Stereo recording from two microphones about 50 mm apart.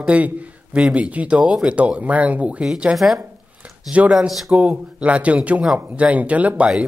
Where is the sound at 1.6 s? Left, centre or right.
Right.